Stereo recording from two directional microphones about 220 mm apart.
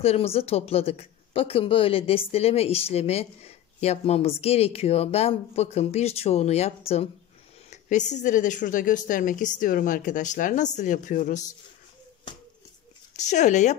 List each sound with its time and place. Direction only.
0.0 s a woman's voice: 25° left (ahead or behind)
13.1 s a woman's voice: 35° left (ahead or behind)